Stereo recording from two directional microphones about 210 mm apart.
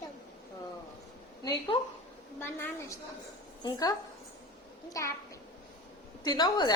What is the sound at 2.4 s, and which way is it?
A woman's voice, 10° left (ahead or behind).